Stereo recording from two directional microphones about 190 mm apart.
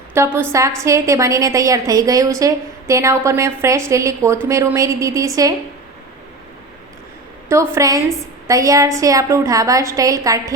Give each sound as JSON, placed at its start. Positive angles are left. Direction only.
{"t": 0.1, "sound": "a woman's voice", "side_deg": -10}
{"t": 7.4, "sound": "a woman's voice", "side_deg": -10}